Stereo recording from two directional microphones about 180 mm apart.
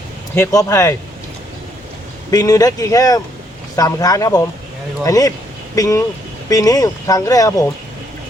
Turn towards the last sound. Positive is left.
turn(degrees=20)  # may be behind; listen again after turning